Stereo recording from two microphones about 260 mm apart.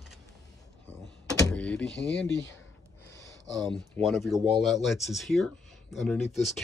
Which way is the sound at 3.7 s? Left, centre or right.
Centre.